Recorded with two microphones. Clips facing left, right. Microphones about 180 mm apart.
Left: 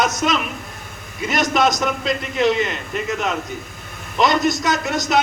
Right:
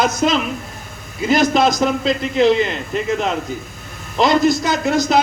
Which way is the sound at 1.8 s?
30° right (ahead or behind).